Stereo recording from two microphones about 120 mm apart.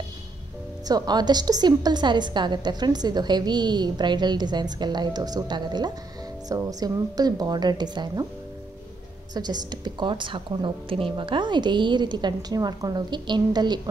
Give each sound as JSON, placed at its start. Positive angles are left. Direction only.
{"t": 0.8, "sound": "a woman's voice", "side_deg": -35}
{"t": 9.3, "sound": "a woman's voice", "side_deg": -35}